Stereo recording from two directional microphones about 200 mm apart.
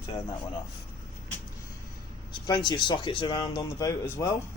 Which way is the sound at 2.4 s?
20° left (ahead or behind).